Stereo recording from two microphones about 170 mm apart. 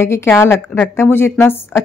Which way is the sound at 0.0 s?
15° left (ahead or behind).